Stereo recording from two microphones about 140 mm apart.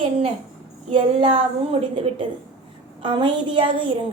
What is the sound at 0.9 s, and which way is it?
Speech, 40° right (ahead or behind).